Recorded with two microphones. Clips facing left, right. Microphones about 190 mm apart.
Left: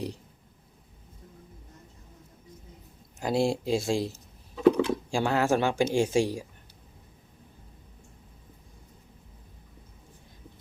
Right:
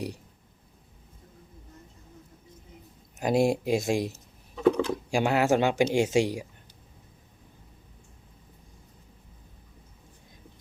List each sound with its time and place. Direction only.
3.2 s speech: 20° right (ahead or behind)
4.5 s a sound: centre (ahead or behind)
5.1 s speech: 15° right (ahead or behind)